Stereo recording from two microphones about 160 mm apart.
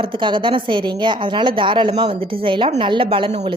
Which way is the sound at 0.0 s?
30° right (ahead or behind).